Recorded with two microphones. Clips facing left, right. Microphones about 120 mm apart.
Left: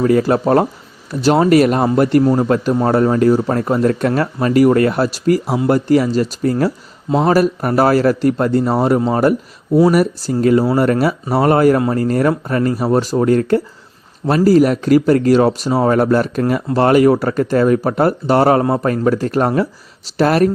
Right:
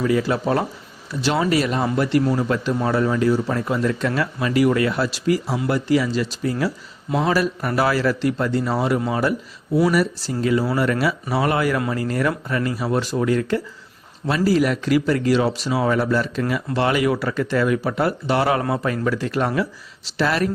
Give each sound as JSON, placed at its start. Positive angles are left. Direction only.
{"t": 0.0, "sound": "speech", "side_deg": 45}